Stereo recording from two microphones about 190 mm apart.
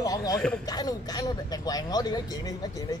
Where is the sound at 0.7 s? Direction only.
20° left (ahead or behind).